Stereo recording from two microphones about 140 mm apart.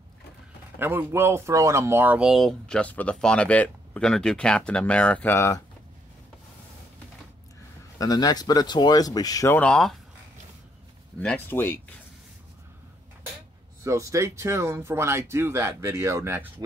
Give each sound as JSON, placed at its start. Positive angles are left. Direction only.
{"t": 0.7, "sound": "speech", "side_deg": -15}
{"t": 8.0, "sound": "speech", "side_deg": 30}
{"t": 9.6, "sound": "speech", "side_deg": 5}
{"t": 11.1, "sound": "speech", "side_deg": 10}
{"t": 13.8, "sound": "speech", "side_deg": -20}